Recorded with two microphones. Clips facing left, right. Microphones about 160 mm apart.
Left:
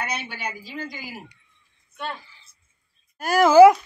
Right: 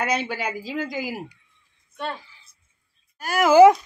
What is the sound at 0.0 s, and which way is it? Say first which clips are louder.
Speech: right 6 dB; 90° right.